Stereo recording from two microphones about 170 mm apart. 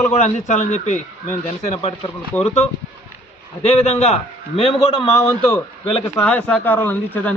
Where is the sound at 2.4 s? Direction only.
40° left (ahead or behind).